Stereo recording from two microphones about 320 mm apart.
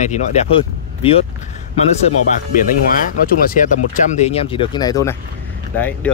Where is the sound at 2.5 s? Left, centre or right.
Left.